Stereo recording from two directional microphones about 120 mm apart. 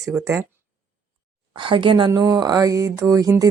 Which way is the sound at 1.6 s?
45° right (ahead or behind).